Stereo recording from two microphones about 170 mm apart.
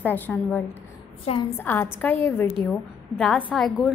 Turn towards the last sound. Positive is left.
turn(degrees=5)  # may be behind; listen again after turning